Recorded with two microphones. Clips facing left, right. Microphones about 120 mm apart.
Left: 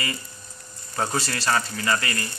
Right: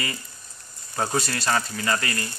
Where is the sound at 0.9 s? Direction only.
10° right (ahead or behind).